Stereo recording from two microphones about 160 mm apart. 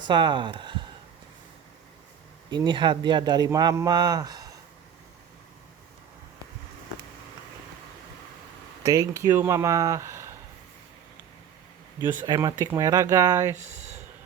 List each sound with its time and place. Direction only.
0.0 s speech: 30° right (ahead or behind)
2.5 s speech: 30° right (ahead or behind)
8.8 s speech: 20° right (ahead or behind)
12.2 s speech: 25° right (ahead or behind)
13.7 s a sound: 45° right (ahead or behind)